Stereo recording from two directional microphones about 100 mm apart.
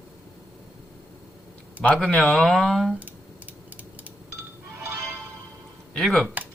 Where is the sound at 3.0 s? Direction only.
15° right (ahead or behind).